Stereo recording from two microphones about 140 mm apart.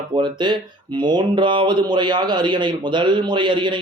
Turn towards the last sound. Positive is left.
turn(degrees=-35)  # may be behind; listen again after turning